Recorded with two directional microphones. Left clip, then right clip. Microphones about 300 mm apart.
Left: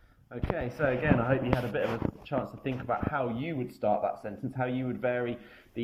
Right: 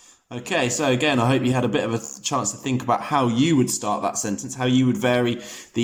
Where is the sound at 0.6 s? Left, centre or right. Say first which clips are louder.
Right 7 dB; centre.